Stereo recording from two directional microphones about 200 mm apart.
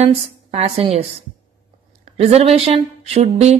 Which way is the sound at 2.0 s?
30° right (ahead or behind).